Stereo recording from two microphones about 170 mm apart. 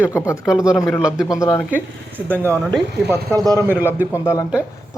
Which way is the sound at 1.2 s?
20° left (ahead or behind).